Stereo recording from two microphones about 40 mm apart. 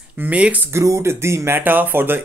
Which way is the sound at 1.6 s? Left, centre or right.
Right.